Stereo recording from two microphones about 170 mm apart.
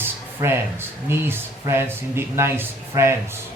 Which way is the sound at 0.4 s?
15° right (ahead or behind).